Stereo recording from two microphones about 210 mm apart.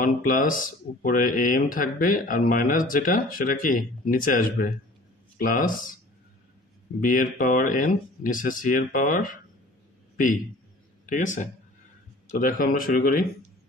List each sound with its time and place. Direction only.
0.0 s speech: 40° left (ahead or behind)
7.0 s speech: 40° left (ahead or behind)
11.1 s speech: 35° left (ahead or behind)